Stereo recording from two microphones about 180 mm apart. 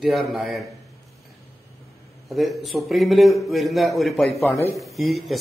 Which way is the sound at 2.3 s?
Centre (ahead or behind).